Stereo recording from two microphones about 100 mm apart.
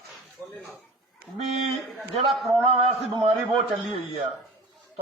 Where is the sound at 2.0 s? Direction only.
Centre (ahead or behind).